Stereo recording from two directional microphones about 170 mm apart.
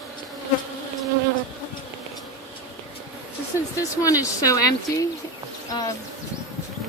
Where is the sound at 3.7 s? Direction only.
20° left (ahead or behind).